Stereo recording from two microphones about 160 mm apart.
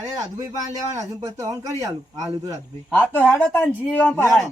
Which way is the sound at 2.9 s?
10° left (ahead or behind).